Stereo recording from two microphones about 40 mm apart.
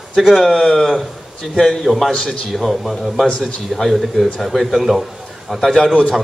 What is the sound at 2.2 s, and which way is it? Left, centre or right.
Speech, centre.